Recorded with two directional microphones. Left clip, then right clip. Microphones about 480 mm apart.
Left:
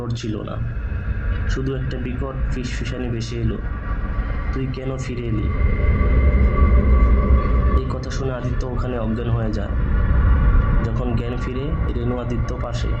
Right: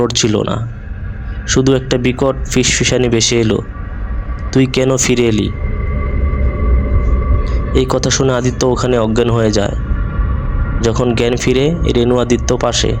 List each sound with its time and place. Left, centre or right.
0.0 s speech: centre
1.5 s speech: centre
4.5 s speech: centre
7.8 s speech: centre
10.8 s speech: centre